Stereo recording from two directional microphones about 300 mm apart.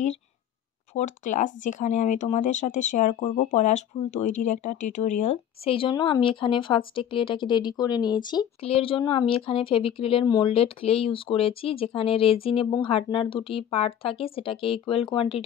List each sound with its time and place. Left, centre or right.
0.9 s speech: left